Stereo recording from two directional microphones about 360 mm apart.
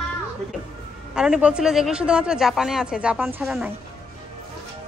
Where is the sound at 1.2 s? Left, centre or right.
Centre.